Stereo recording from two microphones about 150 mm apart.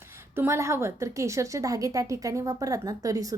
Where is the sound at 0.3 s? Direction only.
20° right (ahead or behind).